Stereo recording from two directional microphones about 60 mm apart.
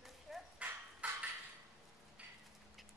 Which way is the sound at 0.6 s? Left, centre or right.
Right.